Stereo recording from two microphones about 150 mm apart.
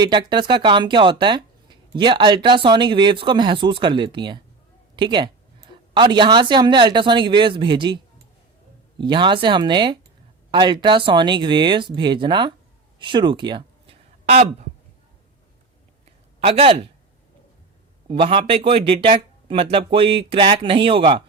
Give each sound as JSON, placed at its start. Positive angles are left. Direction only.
{"t": 0.0, "sound": "speech", "side_deg": -30}
{"t": 9.0, "sound": "speech", "side_deg": -30}
{"t": 14.3, "sound": "speech", "side_deg": -45}
{"t": 16.5, "sound": "speech", "side_deg": -40}
{"t": 18.1, "sound": "speech", "side_deg": -35}